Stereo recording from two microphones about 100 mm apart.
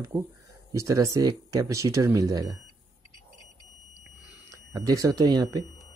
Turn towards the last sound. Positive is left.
turn(degrees=-40)  # may be behind; listen again after turning